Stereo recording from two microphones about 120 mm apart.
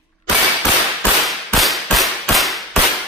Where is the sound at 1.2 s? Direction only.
Centre (ahead or behind).